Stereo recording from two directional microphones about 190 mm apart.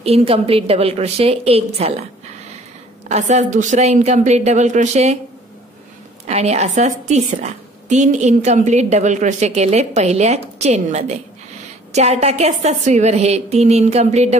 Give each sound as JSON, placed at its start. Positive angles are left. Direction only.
{"t": 0.0, "sound": "a woman's voice", "side_deg": -30}
{"t": 3.1, "sound": "a woman's voice", "side_deg": -35}
{"t": 6.2, "sound": "a woman's voice", "side_deg": -35}